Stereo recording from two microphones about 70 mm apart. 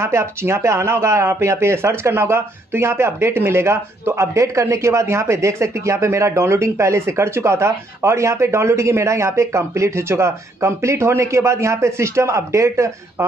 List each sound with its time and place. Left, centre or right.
0.0 s speech: right